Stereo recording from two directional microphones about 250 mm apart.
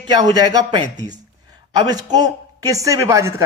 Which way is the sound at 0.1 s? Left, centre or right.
Centre.